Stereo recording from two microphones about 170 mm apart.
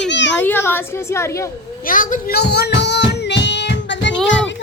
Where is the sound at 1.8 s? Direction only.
50° left (ahead or behind); by 4.1 s 90° left.